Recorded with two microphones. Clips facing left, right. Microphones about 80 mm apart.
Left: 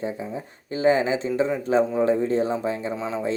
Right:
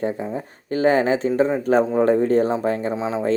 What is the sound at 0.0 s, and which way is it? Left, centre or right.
Speech, right.